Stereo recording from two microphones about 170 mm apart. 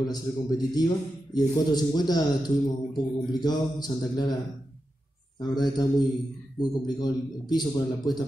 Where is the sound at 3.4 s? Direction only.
25° left (ahead or behind).